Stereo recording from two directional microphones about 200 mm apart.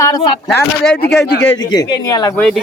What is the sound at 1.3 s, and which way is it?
Speech, 65° left (ahead or behind).